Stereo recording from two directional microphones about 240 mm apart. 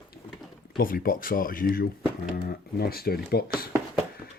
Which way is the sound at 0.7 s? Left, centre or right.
Left.